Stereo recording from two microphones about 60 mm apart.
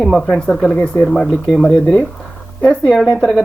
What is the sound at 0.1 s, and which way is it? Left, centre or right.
A woman's voice, centre.